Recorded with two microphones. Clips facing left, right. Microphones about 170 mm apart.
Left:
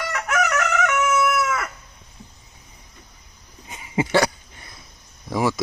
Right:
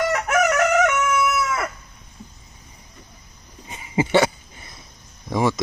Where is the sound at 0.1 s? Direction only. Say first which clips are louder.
Right 3 dB; 40° right (ahead or behind).